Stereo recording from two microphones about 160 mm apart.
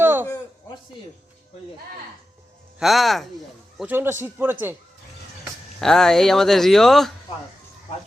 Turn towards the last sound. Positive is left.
turn(degrees=0)  # may be behind; listen again after turning